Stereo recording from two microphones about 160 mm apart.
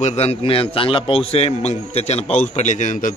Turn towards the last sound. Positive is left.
turn(degrees=50)  # may be behind; listen again after turning